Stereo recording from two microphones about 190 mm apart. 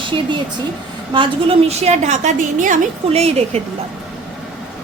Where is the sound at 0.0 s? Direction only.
25° right (ahead or behind).